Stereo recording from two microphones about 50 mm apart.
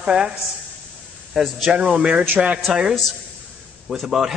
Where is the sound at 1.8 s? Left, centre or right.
Right.